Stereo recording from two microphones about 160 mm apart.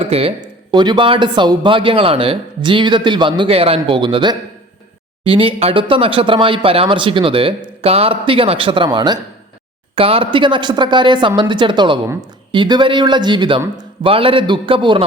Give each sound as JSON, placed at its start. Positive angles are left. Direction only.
{"t": 0.0, "sound": "speech", "side_deg": -40}
{"t": 0.4, "sound": "speech", "side_deg": -25}